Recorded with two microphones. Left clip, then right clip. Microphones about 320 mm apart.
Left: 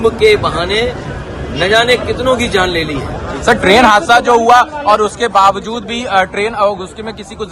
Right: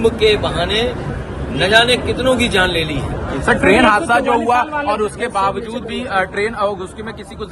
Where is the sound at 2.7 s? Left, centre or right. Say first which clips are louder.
Left 3 dB; left.